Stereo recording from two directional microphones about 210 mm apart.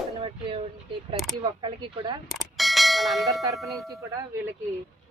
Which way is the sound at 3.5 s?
Centre (ahead or behind).